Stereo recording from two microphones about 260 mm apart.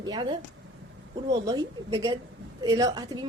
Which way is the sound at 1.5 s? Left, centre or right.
Centre.